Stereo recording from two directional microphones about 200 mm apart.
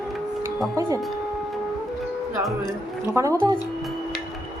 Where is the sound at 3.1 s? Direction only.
15° right (ahead or behind).